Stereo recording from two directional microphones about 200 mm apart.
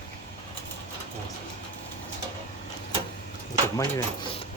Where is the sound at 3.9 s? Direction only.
25° left (ahead or behind).